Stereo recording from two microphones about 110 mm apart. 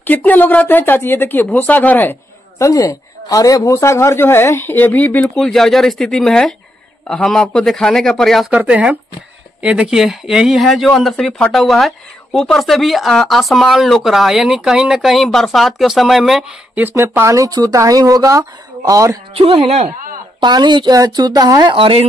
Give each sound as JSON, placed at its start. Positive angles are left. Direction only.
{"t": 0.0, "sound": "speech", "side_deg": 15}
{"t": 2.6, "sound": "speech", "side_deg": 30}
{"t": 5.3, "sound": "speech", "side_deg": 0}
{"t": 8.5, "sound": "speech", "side_deg": -10}
{"t": 16.8, "sound": "speech", "side_deg": -20}
{"t": 19.3, "sound": "a woman's voice", "side_deg": -65}
{"t": 20.3, "sound": "speech", "side_deg": -45}
{"t": 21.7, "sound": "speech", "side_deg": -55}